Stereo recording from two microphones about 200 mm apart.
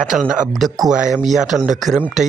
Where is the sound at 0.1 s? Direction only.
5° right (ahead or behind).